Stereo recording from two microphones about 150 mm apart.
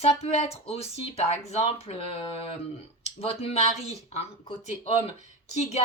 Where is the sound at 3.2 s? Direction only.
40° left (ahead or behind).